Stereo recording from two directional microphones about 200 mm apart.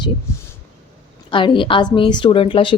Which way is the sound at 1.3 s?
25° left (ahead or behind).